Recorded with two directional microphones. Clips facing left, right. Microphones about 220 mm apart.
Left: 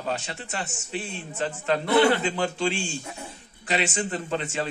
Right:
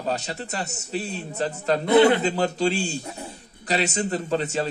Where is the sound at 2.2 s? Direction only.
40° right (ahead or behind).